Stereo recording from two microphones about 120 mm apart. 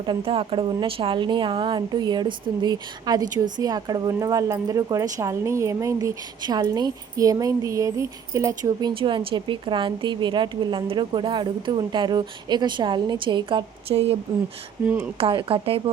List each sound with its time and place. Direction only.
0.0 s a woman's voice: 45° right (ahead or behind); by 8.9 s 30° right (ahead or behind)
8.9 s a woman's voice: 45° right (ahead or behind)
15.2 s speech: 45° right (ahead or behind)